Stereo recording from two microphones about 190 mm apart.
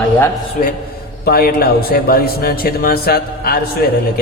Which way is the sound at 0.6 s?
45° left (ahead or behind).